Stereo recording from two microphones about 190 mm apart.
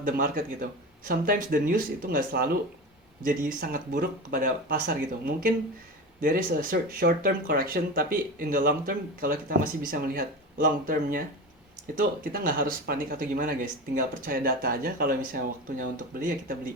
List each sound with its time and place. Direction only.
0.0 s speech: 50° right (ahead or behind)